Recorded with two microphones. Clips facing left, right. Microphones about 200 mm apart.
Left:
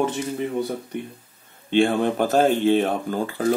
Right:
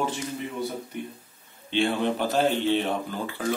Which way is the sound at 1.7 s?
50° left (ahead or behind).